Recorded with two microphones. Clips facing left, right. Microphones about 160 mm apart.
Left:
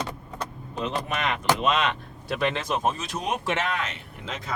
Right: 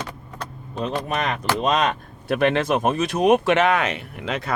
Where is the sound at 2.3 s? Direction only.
60° right (ahead or behind).